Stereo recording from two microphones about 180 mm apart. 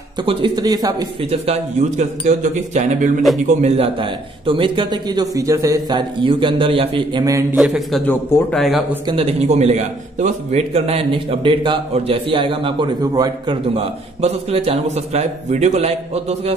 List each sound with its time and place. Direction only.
0.2 s a man's voice: 30° right (ahead or behind)
1.3 s a man's voice: 35° right (ahead or behind)
7.5 s speech: centre (ahead or behind)
9.0 s a man's voice: 30° right (ahead or behind)
13.7 s a man's voice: 35° right (ahead or behind)